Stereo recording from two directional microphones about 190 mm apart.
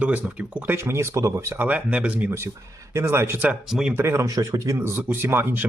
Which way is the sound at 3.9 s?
15° right (ahead or behind).